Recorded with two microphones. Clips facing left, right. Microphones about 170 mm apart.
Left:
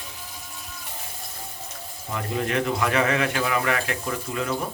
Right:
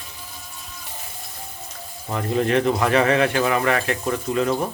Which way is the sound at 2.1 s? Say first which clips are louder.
Right 6 dB; 35° right (ahead or behind).